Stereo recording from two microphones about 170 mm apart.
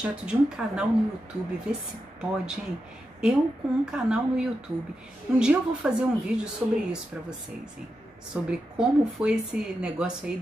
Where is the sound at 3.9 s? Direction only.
5° right (ahead or behind).